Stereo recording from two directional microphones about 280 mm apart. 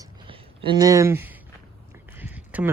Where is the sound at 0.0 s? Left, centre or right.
Centre.